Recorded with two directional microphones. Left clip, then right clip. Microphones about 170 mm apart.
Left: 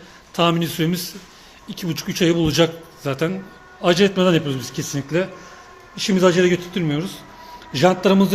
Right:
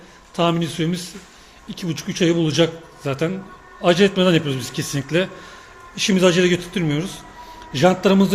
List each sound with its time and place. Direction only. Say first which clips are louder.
0.3 s a man's voice: left 1 dB; 10° left (ahead or behind)